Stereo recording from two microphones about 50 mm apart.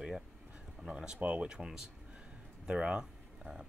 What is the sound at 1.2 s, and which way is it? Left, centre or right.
Speech, right.